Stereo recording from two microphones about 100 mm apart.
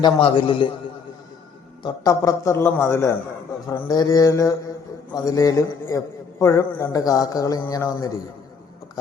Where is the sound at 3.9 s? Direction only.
40° left (ahead or behind).